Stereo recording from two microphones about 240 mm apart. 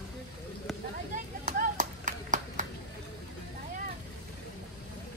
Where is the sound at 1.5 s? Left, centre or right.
Right.